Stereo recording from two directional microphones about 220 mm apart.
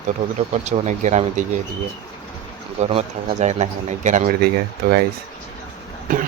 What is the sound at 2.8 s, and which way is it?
Speech, 30° right (ahead or behind).